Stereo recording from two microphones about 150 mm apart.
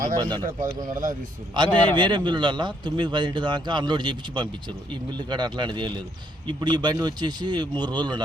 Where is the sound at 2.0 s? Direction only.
30° right (ahead or behind).